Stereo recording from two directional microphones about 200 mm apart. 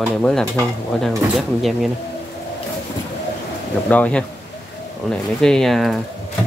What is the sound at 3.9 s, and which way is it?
Speech, 5° left (ahead or behind).